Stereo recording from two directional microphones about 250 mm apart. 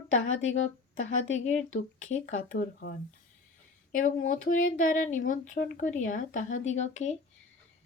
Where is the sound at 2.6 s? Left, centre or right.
Left.